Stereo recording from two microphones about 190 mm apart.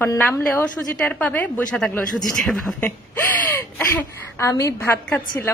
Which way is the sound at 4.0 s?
15° left (ahead or behind).